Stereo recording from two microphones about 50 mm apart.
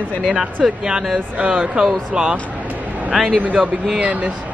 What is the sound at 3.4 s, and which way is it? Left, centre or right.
Speech, right.